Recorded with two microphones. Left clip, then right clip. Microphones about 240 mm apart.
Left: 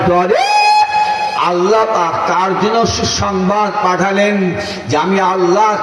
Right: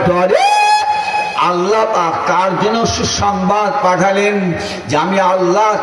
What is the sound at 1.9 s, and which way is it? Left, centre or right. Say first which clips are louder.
A man's voice: even; right.